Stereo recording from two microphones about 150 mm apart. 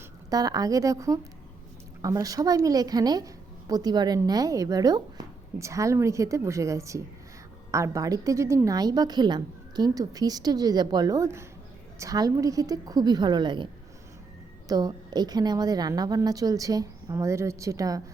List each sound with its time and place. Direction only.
0.3 s a woman's voice: 25° right (ahead or behind)
14.7 s a woman's voice: 25° right (ahead or behind)